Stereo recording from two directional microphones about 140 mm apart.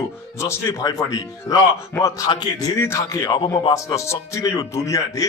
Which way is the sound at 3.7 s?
20° left (ahead or behind).